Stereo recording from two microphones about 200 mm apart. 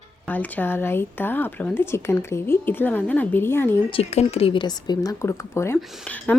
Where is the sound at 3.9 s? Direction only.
30° left (ahead or behind).